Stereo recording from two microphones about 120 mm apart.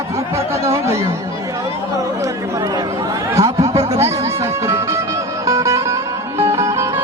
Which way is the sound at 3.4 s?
25° right (ahead or behind).